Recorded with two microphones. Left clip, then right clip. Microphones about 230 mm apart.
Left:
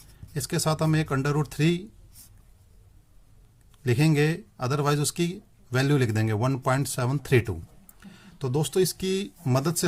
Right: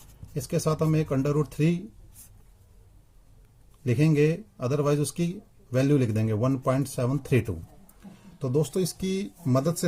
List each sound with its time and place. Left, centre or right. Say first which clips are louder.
0.3 s speech: even; left
3.8 s speech: right 1 dB; left